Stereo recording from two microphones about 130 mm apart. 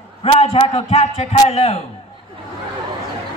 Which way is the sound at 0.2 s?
50° left (ahead or behind).